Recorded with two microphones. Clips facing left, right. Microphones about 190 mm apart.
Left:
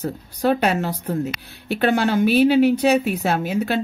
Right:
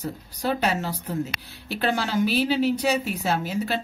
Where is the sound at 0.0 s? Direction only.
55° left (ahead or behind).